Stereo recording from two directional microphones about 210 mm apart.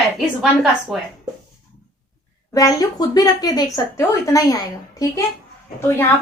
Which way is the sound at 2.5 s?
15° left (ahead or behind).